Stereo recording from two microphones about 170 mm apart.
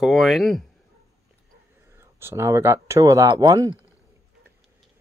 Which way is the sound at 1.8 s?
15° right (ahead or behind).